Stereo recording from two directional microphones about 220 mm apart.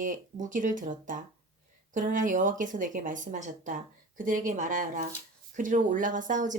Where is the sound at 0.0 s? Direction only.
35° right (ahead or behind).